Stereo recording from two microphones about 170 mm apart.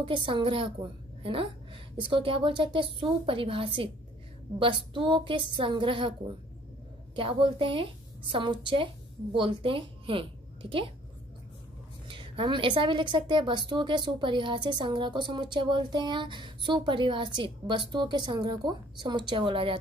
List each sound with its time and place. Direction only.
0.0 s a woman's voice: 30° right (ahead or behind)
12.1 s a woman's voice: 30° right (ahead or behind)